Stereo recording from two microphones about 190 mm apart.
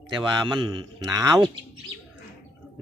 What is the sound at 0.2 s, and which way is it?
Speech, 25° right (ahead or behind).